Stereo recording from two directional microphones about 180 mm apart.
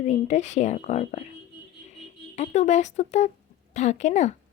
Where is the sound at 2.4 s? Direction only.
40° left (ahead or behind).